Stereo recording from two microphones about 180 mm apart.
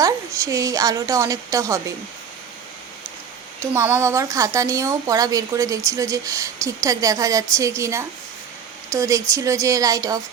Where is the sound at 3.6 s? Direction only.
15° right (ahead or behind).